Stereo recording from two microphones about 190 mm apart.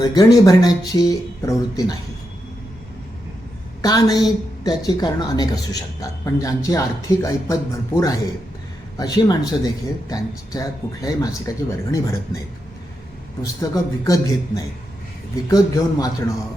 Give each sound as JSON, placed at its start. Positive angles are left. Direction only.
{"t": 0.0, "sound": "speech", "side_deg": 20}
{"t": 3.8, "sound": "a woman's voice", "side_deg": 20}
{"t": 13.4, "sound": "speech", "side_deg": 20}